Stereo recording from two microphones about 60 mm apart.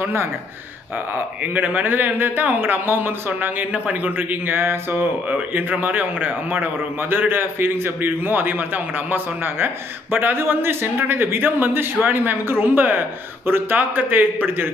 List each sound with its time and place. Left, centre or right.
0.0 s speech: right
1.4 s a man's voice: right